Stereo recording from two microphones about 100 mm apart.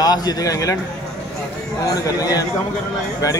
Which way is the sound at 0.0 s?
40° left (ahead or behind).